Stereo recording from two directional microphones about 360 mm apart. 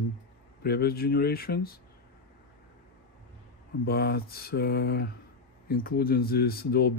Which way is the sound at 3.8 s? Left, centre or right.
Left.